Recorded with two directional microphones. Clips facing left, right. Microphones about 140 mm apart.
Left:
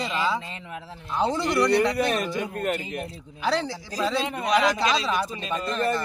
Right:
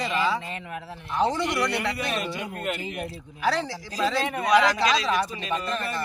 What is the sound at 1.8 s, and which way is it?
Speech, 40° left (ahead or behind).